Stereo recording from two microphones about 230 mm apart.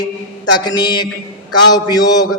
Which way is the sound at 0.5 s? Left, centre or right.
Centre.